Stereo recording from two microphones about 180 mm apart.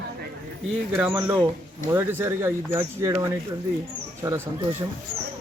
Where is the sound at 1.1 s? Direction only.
20° right (ahead or behind).